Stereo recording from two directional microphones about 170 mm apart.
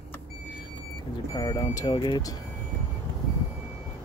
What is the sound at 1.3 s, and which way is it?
Speech, 25° left (ahead or behind).